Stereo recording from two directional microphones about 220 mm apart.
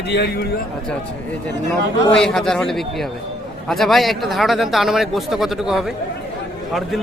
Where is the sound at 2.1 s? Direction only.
5° left (ahead or behind).